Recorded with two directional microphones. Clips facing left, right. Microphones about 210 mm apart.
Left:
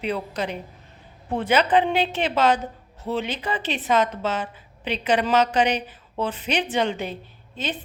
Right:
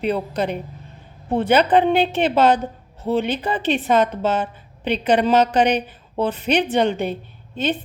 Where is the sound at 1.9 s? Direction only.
55° right (ahead or behind).